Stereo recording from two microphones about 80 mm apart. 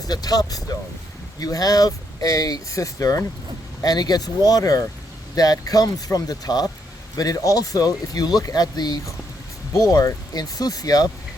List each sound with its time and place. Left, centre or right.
0.1 s speech: left
3.8 s speech: left